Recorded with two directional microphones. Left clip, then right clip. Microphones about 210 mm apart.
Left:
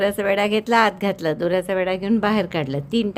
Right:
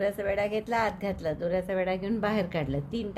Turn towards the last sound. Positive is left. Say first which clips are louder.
# left 9 dB
turn(degrees=30)  # may be behind; listen again after turning